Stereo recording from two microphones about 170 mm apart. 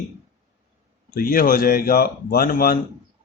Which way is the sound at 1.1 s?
55° left (ahead or behind).